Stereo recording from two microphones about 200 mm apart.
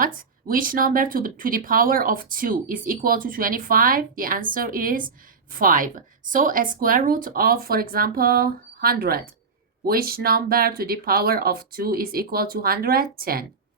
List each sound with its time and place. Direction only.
0.0 s speech: 45° right (ahead or behind)